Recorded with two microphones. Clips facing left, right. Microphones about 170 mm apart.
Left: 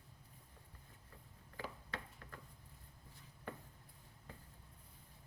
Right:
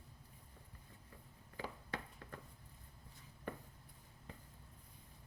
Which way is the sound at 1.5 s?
20° right (ahead or behind).